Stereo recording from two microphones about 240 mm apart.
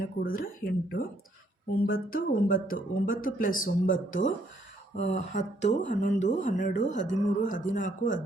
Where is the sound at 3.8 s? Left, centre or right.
Left.